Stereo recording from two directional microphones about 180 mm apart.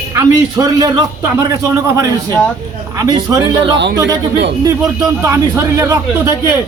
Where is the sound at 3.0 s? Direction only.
20° right (ahead or behind).